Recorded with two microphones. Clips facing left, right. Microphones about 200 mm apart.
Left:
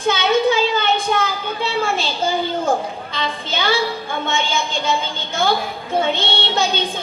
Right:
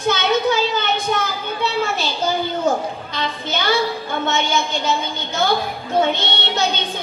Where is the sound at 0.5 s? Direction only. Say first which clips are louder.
Left 2 dB; 55° left (ahead or behind).